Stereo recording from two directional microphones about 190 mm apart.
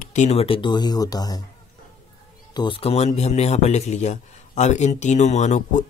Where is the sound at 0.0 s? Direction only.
40° left (ahead or behind); by 1.4 s 20° left (ahead or behind).